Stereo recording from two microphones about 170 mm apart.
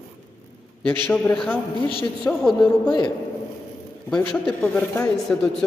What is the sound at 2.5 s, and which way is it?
Speech, 25° left (ahead or behind).